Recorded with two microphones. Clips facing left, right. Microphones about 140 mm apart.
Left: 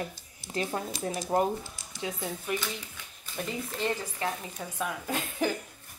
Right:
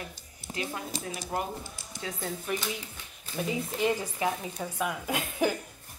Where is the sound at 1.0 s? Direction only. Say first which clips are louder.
Left 8 dB; 35° left (ahead or behind).